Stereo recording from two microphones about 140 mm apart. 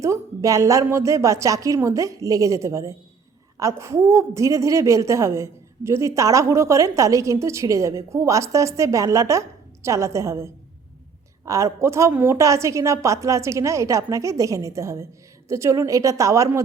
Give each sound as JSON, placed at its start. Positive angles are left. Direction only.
{"t": 0.0, "sound": "a woman's voice", "side_deg": -25}